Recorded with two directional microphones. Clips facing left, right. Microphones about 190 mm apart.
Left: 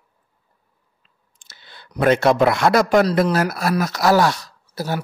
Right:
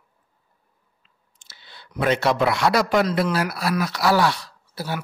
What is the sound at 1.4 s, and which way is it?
Speech, 50° left (ahead or behind).